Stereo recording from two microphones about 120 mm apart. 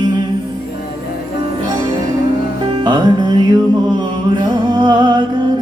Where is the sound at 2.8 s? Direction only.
40° right (ahead or behind).